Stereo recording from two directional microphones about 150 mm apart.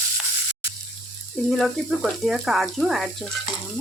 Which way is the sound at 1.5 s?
Centre (ahead or behind).